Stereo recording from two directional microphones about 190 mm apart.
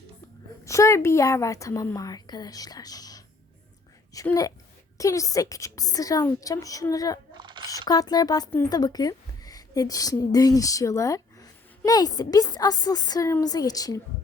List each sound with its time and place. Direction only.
0.6 s a woman's voice: 15° left (ahead or behind)
7.3 s a sound: 25° right (ahead or behind)
7.7 s speech: 20° left (ahead or behind)